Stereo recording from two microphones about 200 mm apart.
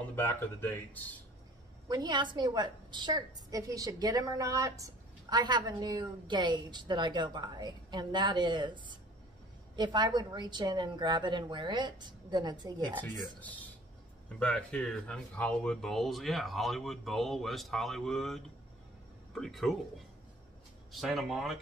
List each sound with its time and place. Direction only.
0.1 s speech: 15° left (ahead or behind)
1.9 s a woman's voice: 20° right (ahead or behind)
14.4 s speech: 5° left (ahead or behind)
20.9 s speech: centre (ahead or behind)